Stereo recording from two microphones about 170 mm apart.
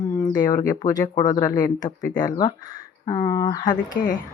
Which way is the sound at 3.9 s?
50° left (ahead or behind).